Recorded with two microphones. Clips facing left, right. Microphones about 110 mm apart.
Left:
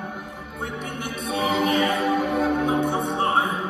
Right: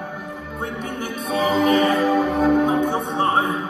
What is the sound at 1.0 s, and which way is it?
Music, 30° right (ahead or behind).